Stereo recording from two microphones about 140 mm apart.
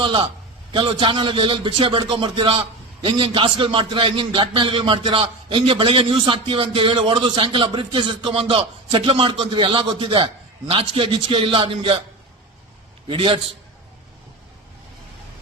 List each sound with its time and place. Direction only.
0.0 s a man's voice: 35° right (ahead or behind)
13.1 s a man's voice: 40° right (ahead or behind)